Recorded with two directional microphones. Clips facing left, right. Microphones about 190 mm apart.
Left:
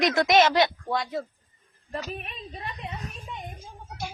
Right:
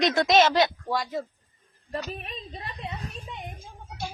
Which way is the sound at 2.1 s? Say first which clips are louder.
Even; 35° right (ahead or behind).